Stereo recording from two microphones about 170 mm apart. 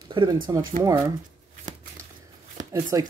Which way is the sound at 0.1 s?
30° right (ahead or behind).